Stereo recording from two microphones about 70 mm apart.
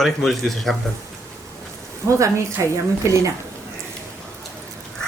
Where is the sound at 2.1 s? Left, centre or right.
Right.